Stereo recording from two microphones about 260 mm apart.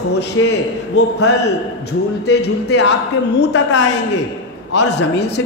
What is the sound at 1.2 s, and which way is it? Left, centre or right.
A man's voice, left.